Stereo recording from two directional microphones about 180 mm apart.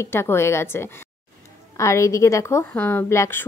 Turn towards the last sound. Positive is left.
turn(degrees=15)  # may be behind; listen again after turning